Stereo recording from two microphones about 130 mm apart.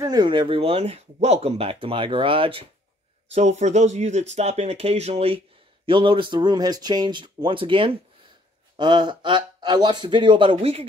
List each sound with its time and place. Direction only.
0.0 s speech: 30° right (ahead or behind)
3.3 s speech: 60° right (ahead or behind)
5.9 s speech: 40° right (ahead or behind)